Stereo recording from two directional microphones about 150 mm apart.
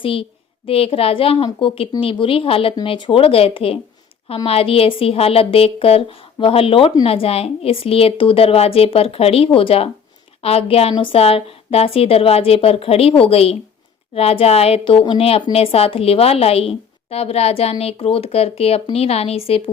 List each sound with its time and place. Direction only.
0.0 s a woman's voice: 35° left (ahead or behind)